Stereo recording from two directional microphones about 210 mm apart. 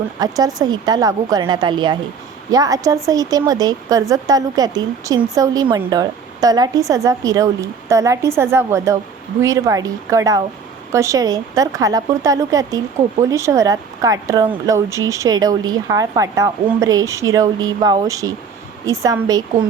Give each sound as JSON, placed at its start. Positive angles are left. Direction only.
{"t": 0.2, "sound": "a woman's voice", "side_deg": -15}